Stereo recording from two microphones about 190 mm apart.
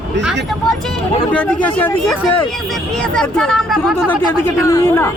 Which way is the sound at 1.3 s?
10° left (ahead or behind).